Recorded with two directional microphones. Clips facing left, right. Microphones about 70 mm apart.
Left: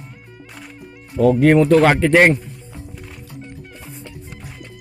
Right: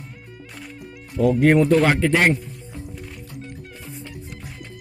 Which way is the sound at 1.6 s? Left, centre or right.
Left.